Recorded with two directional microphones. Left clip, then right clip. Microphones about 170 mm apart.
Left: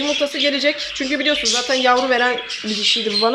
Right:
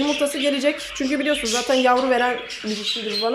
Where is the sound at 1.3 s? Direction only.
Centre (ahead or behind).